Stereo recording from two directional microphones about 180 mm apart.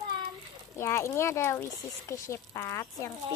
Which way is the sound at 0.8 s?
15° left (ahead or behind).